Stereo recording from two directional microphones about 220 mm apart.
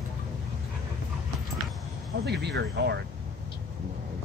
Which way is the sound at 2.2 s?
50° right (ahead or behind).